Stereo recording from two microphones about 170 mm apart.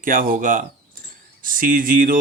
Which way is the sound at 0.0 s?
55° right (ahead or behind).